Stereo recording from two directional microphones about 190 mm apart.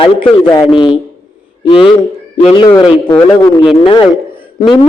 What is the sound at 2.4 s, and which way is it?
Speech, 30° left (ahead or behind).